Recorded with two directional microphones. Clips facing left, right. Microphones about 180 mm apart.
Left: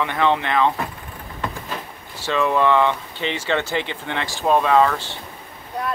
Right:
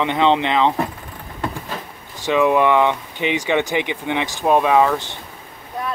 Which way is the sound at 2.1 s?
15° right (ahead or behind).